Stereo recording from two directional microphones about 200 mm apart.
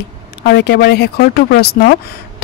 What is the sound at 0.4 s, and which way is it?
Speech, 55° left (ahead or behind).